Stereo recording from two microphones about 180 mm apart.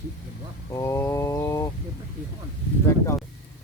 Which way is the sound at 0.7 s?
15° left (ahead or behind).